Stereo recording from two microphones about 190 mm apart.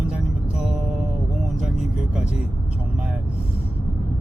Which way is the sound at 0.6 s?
5° right (ahead or behind).